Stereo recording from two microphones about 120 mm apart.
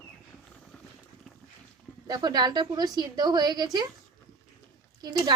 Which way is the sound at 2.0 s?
35° right (ahead or behind).